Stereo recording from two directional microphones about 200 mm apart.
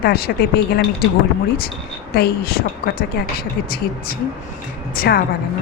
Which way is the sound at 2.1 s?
50° left (ahead or behind).